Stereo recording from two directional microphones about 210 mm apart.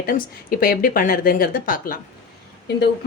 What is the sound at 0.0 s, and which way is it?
A woman's voice, 45° left (ahead or behind).